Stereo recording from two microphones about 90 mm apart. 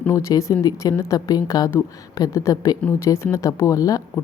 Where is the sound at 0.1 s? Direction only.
35° left (ahead or behind).